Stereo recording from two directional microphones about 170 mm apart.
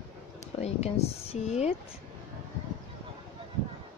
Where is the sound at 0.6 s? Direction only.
40° left (ahead or behind).